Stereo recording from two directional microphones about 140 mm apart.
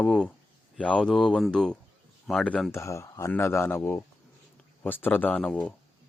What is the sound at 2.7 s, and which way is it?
Speech, 20° left (ahead or behind).